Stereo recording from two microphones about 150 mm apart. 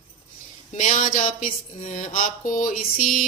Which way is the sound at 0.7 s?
60° left (ahead or behind).